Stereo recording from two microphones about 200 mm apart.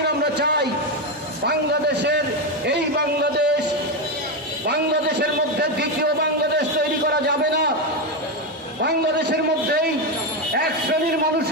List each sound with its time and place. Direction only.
0.2 s a man's voice: 55° right (ahead or behind)
5.2 s a man's voice: 55° right (ahead or behind)
7.1 s a sound: 55° right (ahead or behind)
8.8 s a man's voice: 55° right (ahead or behind)